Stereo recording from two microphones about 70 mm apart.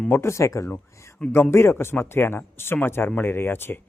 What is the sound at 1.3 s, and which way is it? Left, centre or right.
Speech, left.